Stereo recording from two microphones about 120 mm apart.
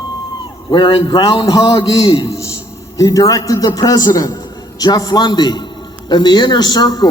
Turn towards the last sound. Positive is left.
turn(degrees=35)  # may be behind; listen again after turning